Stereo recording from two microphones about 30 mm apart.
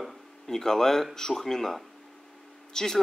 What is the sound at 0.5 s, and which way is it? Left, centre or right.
A man's voice, centre.